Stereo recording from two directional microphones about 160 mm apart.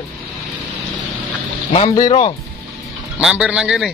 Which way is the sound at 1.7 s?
25° left (ahead or behind).